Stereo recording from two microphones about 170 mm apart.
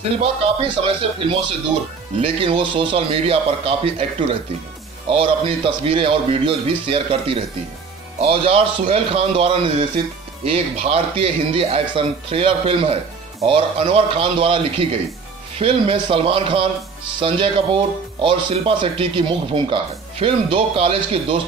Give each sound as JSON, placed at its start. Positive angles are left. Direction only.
{"t": 0.0, "sound": "a man's voice", "side_deg": -35}